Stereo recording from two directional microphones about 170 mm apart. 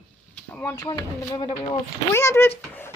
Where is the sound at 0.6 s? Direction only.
20° left (ahead or behind).